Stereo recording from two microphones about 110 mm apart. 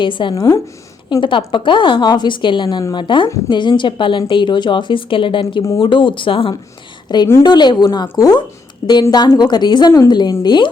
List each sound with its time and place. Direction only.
0.0 s a woman's voice: 50° left (ahead or behind)
0.3 s a woman's voice: 30° left (ahead or behind)
1.2 s a woman's voice: 50° left (ahead or behind)
7.1 s a woman's voice: 40° left (ahead or behind)